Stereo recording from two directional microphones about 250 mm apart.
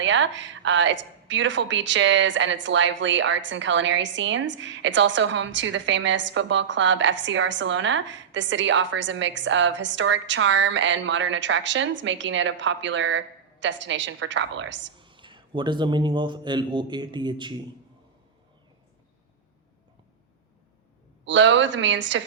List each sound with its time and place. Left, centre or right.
0.0 s a woman's voice: right
14.9 s a man's voice: centre
21.2 s a woman's voice: right